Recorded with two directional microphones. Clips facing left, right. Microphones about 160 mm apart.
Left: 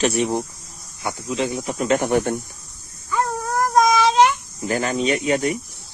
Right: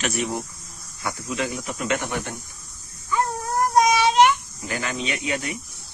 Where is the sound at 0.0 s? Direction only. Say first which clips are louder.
Left 6 dB; 30° left (ahead or behind).